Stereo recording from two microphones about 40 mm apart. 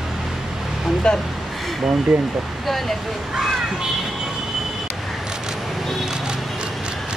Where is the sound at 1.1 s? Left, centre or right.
Centre.